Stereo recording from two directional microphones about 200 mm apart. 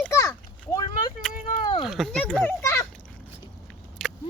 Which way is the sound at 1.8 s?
Centre (ahead or behind).